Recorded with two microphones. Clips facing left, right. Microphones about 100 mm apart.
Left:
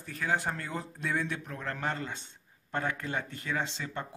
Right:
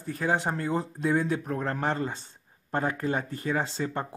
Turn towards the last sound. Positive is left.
turn(degrees=-40)  # may be behind; listen again after turning